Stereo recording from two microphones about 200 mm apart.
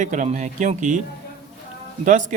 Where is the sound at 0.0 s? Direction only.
40° right (ahead or behind).